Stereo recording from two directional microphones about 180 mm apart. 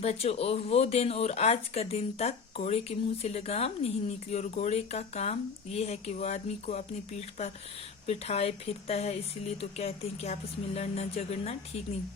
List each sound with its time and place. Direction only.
0.0 s speech: 35° left (ahead or behind)